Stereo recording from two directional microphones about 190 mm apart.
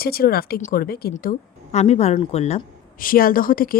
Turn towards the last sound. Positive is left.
turn(degrees=50)  # may be behind; listen again after turning